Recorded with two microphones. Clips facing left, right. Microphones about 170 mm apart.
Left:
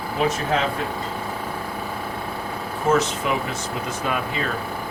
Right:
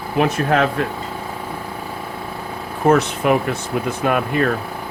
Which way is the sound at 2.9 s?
60° right (ahead or behind).